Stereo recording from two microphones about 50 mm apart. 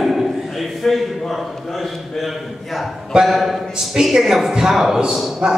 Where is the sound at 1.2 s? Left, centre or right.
Centre.